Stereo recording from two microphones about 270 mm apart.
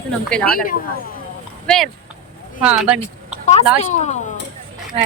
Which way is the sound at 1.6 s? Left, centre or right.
Centre.